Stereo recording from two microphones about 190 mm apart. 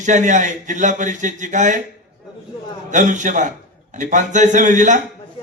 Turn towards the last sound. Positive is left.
turn(degrees=-40)  # may be behind; listen again after turning